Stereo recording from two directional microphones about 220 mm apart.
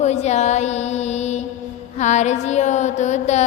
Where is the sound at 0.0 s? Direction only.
30° left (ahead or behind).